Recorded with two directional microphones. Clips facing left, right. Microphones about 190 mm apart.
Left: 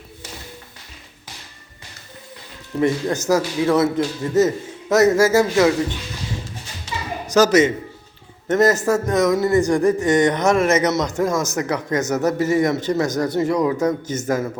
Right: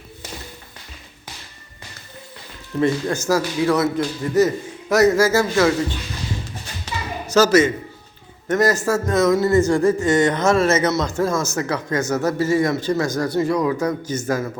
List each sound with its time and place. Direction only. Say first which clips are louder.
2.8 s a man's voice: left 1 dB; 20° left (ahead or behind)
7.3 s a man's voice: even; 15° left (ahead or behind)